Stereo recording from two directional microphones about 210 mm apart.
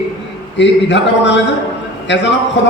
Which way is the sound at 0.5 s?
55° left (ahead or behind).